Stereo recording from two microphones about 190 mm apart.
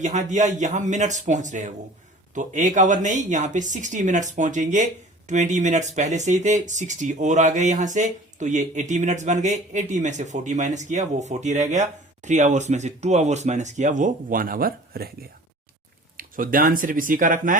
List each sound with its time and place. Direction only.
0.0 s speech: 40° right (ahead or behind)
16.1 s speech: 45° right (ahead or behind)